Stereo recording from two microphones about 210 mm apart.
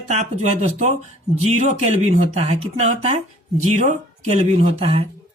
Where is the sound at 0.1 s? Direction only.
35° right (ahead or behind).